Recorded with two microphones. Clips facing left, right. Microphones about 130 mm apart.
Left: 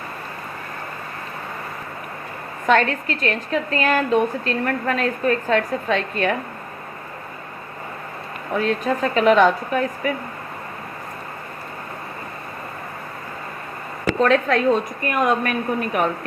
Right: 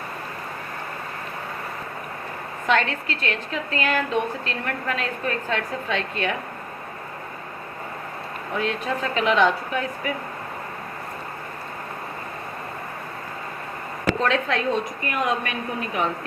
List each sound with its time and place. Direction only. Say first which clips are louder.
2.6 s a woman's voice: left 4 dB; 45° left (ahead or behind)
8.5 s a woman's voice: left 5 dB; 40° left (ahead or behind)
14.1 s a woman's voice: left 5 dB; 45° left (ahead or behind)